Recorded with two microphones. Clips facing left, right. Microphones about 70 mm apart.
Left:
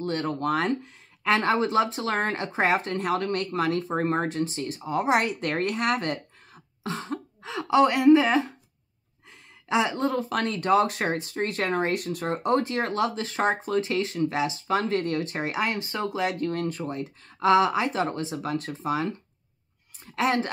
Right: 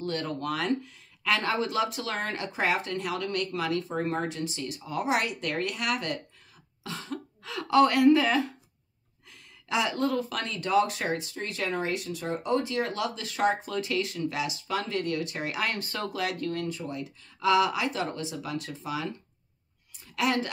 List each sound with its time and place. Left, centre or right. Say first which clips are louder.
0.0 s speech: left 4 dB; left
7.4 s speech: left 1 dB; left
20.2 s speech: left 3 dB; left